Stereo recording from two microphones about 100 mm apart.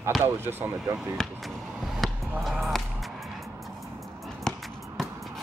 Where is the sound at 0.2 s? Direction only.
20° right (ahead or behind).